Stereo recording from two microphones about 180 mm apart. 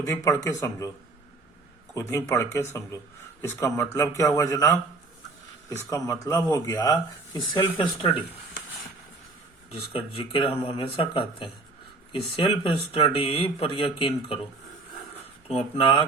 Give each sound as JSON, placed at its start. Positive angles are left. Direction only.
{"t": 0.0, "sound": "a man's voice", "side_deg": 15}
{"t": 2.0, "sound": "a man's voice", "side_deg": 15}
{"t": 9.9, "sound": "speech", "side_deg": 30}
{"t": 15.4, "sound": "speech", "side_deg": 30}